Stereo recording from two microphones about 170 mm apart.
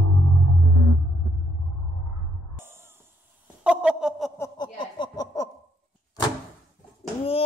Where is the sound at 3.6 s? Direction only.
5° right (ahead or behind).